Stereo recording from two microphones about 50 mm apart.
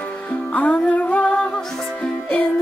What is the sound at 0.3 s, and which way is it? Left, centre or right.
Music, left.